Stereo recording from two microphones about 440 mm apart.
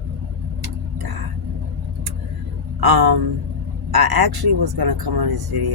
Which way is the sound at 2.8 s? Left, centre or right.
Right.